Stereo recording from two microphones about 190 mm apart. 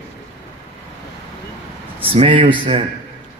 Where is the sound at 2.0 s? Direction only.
30° right (ahead or behind).